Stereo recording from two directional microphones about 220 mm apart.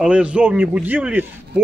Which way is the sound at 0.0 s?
5° right (ahead or behind).